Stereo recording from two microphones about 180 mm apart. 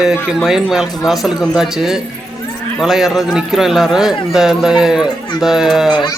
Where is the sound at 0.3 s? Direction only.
Centre (ahead or behind).